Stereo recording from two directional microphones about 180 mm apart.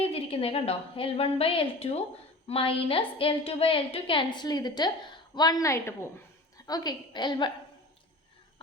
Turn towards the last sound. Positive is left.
turn(degrees=25)  # may be behind; listen again after turning